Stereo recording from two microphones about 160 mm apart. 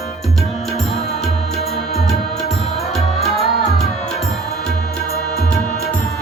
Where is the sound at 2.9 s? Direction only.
Centre (ahead or behind).